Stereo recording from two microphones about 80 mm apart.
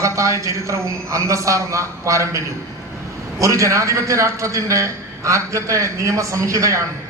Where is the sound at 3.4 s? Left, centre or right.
Right.